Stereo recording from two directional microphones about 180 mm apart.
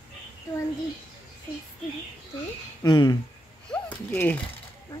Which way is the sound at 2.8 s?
25° left (ahead or behind).